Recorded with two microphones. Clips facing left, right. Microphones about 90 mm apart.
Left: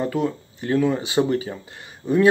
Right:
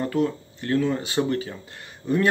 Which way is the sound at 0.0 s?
10° left (ahead or behind).